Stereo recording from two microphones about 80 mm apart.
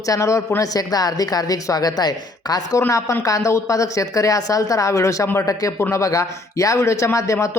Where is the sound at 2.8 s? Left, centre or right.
Left.